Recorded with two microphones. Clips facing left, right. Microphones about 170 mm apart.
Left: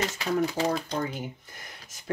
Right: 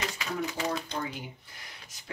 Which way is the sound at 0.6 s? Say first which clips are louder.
Left 5 dB; 45° left (ahead or behind).